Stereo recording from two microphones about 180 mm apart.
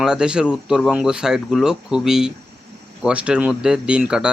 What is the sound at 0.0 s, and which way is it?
Speech, 5° right (ahead or behind).